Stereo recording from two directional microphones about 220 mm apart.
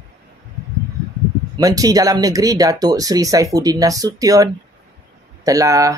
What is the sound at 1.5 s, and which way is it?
Speech, 15° right (ahead or behind).